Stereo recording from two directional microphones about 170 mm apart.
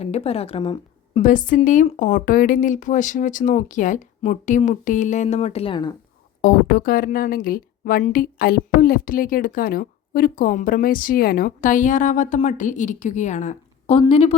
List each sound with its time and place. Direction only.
0.0 s a woman's voice: 35° left (ahead or behind)
1.2 s a woman's voice: 50° left (ahead or behind); by 5.9 s 30° left (ahead or behind)
6.4 s a woman's voice: 60° left (ahead or behind); by 14.3 s 35° left (ahead or behind)